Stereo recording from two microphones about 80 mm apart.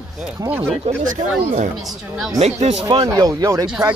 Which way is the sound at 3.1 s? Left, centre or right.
Right.